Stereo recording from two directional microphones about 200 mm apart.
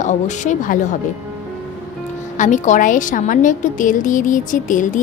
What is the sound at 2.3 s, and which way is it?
A woman's voice, 40° left (ahead or behind).